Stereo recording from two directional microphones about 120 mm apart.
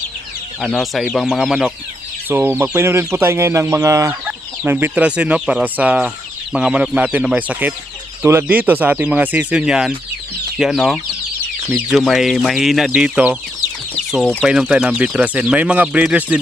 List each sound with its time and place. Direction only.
0.8 s speech: centre (ahead or behind)
2.3 s speech: 15° right (ahead or behind)